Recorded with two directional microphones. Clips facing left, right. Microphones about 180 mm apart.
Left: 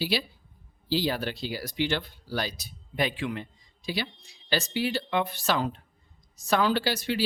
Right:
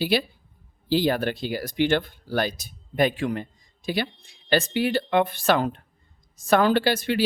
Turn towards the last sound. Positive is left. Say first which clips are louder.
# right 5 dB
turn(degrees=-55)  # may be behind; listen again after turning